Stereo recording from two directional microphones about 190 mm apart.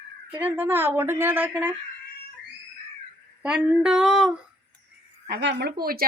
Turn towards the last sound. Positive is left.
turn(degrees=-50)  # may be behind; listen again after turning